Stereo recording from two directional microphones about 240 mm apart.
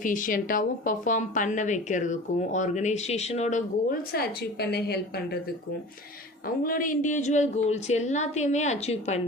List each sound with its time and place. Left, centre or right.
0.0 s a woman's voice: left
6.7 s a woman's voice: left